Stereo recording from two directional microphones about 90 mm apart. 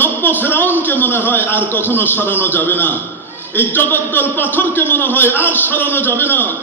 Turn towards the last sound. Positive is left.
turn(degrees=20)  # may be behind; listen again after turning